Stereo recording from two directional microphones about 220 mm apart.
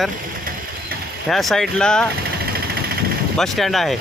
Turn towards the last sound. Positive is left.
turn(degrees=0)  # may be behind; listen again after turning